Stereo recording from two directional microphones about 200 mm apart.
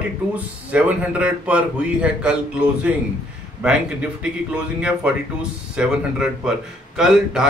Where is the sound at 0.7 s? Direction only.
5° right (ahead or behind).